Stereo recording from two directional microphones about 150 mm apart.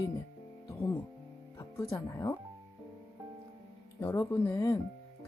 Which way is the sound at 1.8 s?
20° left (ahead or behind).